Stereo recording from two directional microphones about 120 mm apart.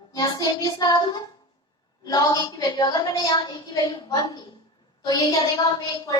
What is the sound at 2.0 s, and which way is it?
A woman's voice, 30° left (ahead or behind).